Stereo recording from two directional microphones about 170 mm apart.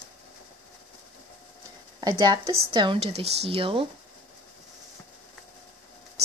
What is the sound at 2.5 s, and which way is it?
Speech, 30° right (ahead or behind).